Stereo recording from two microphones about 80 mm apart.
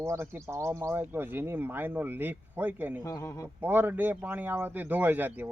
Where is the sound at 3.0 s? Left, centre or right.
Left.